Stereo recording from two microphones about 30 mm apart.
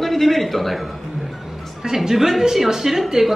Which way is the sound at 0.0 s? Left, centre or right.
Centre.